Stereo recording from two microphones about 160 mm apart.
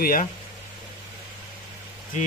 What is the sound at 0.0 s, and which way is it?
Speech, 60° left (ahead or behind).